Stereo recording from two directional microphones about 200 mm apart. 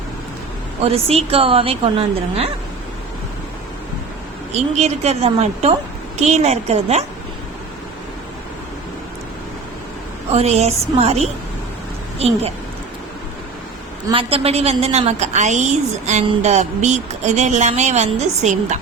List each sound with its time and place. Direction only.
0.8 s a woman's voice: 30° right (ahead or behind)
4.7 s a woman's voice: 35° right (ahead or behind)
10.3 s a woman's voice: 30° right (ahead or behind)
14.1 s a woman's voice: 30° right (ahead or behind)